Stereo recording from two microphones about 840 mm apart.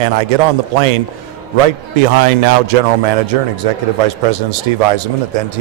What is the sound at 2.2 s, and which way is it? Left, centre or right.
A man's voice, right.